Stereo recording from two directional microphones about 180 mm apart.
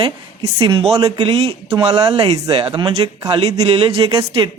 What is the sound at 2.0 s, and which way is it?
Speech, 20° right (ahead or behind).